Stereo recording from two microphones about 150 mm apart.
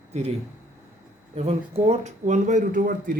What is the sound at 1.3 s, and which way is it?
Speech, 45° right (ahead or behind).